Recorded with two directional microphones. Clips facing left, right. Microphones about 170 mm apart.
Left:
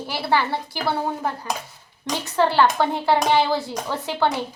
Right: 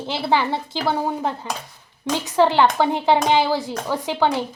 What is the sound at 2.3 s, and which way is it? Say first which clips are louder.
Speech: right 2 dB; 15° right (ahead or behind).